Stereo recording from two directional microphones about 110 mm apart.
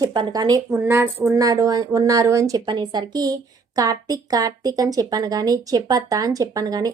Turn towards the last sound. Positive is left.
turn(degrees=-35)  # may be behind; listen again after turning